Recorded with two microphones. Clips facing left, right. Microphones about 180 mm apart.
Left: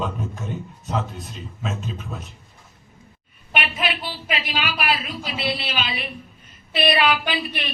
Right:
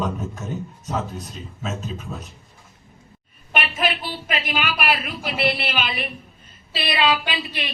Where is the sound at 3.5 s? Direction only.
45° right (ahead or behind).